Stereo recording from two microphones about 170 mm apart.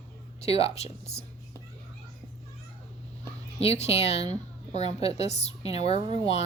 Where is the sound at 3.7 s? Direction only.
40° left (ahead or behind).